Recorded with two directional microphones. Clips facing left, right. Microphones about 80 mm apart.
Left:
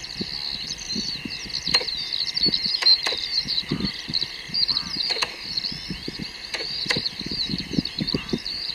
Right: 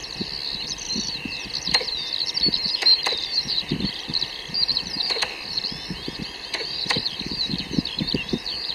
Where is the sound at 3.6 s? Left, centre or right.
Left.